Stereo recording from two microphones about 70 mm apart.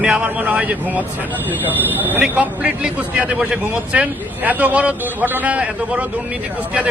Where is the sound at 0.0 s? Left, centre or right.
Centre.